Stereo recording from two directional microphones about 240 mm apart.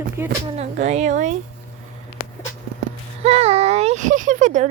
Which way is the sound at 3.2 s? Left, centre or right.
Right.